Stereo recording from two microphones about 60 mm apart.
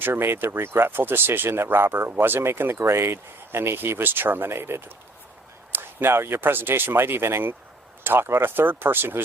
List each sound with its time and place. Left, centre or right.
0.0 s speech: right